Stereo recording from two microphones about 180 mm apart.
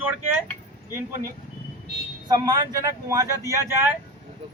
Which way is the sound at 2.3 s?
20° right (ahead or behind).